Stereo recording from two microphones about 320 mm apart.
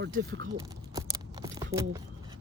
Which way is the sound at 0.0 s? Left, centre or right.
Right.